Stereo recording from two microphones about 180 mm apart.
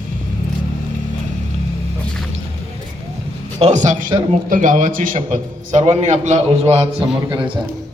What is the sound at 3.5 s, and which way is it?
A man's voice, 35° right (ahead or behind).